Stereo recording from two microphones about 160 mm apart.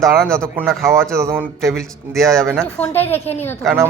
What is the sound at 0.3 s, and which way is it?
A man's voice, 15° right (ahead or behind).